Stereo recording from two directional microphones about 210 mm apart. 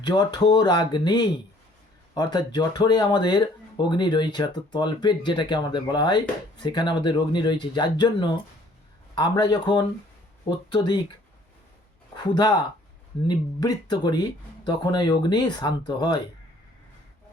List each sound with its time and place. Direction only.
0.0 s speech: 20° left (ahead or behind)
12.2 s speech: 20° left (ahead or behind)